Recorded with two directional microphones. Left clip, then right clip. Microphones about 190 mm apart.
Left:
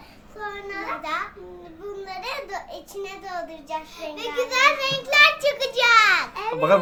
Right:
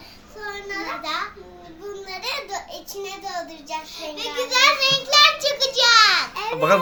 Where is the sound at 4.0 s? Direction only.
15° left (ahead or behind).